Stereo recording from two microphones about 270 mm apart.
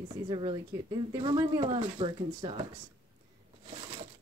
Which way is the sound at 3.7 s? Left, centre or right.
Centre.